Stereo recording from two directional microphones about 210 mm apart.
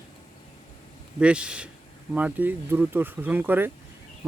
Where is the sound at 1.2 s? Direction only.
5° right (ahead or behind).